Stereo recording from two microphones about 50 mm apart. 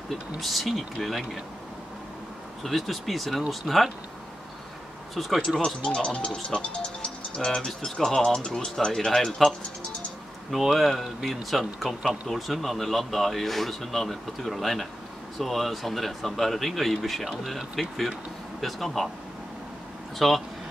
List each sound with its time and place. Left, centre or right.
0.1 s speech: centre
2.6 s speech: centre
5.1 s speech: centre
5.8 s speech: left; by 19.0 s centre
20.2 s speech: centre